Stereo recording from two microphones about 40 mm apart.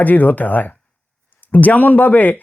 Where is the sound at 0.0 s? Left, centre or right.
Left.